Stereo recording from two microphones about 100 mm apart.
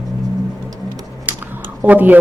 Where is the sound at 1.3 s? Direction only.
20° right (ahead or behind).